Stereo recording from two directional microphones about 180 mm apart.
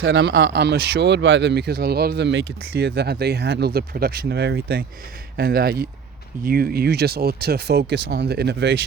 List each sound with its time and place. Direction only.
0.0 s speech: 65° right (ahead or behind)